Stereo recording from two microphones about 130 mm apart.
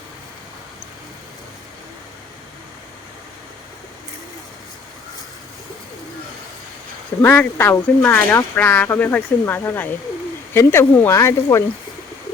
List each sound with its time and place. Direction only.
7.2 s speech: 20° left (ahead or behind)